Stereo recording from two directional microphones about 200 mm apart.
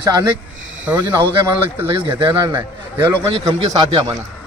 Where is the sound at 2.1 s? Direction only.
20° right (ahead or behind).